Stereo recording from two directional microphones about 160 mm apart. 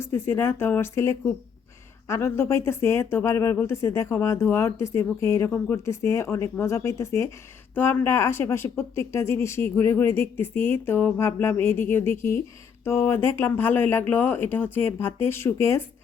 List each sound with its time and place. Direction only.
0.0 s speech: 15° left (ahead or behind)